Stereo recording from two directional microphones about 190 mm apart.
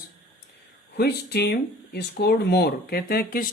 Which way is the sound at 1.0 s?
55° left (ahead or behind).